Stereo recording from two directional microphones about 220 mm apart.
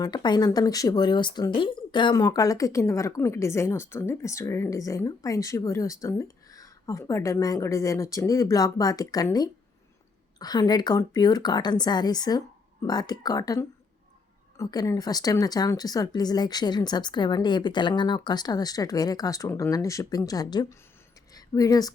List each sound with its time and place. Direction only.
0.0 s speech: 20° left (ahead or behind)